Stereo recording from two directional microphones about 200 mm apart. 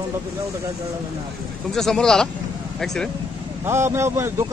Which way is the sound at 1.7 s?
Centre (ahead or behind).